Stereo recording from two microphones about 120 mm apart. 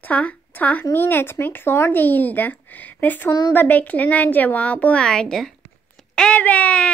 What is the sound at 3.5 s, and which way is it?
Speech, 15° left (ahead or behind).